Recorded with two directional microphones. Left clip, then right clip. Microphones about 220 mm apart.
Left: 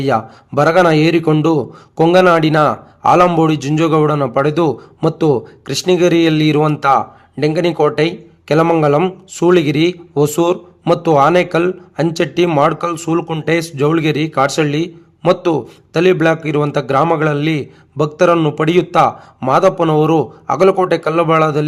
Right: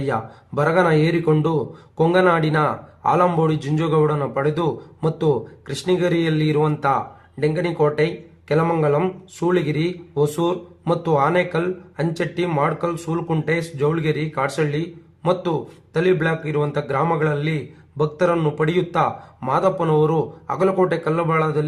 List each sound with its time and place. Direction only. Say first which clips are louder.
0.0 s a man's voice: left 8 dB; 40° left (ahead or behind)